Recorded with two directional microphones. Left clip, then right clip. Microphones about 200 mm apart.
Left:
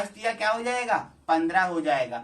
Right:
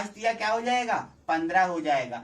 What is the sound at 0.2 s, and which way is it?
Speech, 10° right (ahead or behind).